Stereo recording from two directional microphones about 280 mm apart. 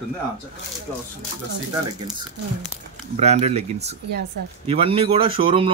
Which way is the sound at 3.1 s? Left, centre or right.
Right.